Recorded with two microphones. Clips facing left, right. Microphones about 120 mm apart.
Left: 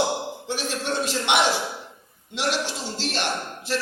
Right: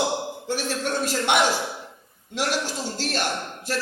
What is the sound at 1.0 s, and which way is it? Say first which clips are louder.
A man's voice: right 1 dB; 45° right (ahead or behind).